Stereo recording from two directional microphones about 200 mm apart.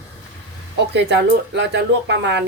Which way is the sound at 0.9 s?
60° right (ahead or behind).